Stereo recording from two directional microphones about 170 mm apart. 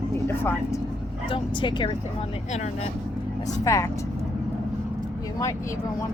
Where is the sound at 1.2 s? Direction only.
30° left (ahead or behind).